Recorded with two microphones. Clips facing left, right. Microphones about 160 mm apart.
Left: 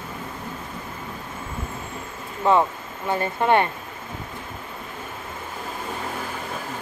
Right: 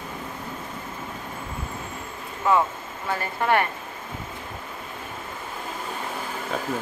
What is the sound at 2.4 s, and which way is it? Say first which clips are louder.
Speech: left 2 dB; 25° left (ahead or behind).